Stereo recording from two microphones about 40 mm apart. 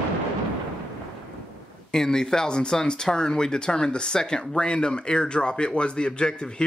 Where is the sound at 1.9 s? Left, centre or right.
Centre.